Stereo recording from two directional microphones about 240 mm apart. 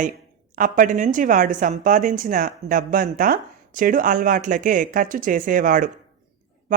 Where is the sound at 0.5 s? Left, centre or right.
Right.